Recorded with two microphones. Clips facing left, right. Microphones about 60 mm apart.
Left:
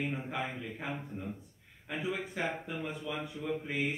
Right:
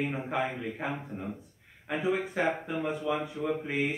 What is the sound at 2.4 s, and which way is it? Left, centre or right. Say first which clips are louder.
Speech: right 6 dB; right.